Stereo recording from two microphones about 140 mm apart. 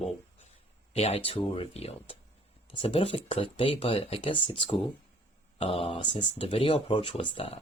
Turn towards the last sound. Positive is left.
turn(degrees=40)  # may be behind; listen again after turning